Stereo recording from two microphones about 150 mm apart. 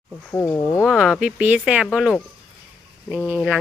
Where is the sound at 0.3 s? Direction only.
20° left (ahead or behind).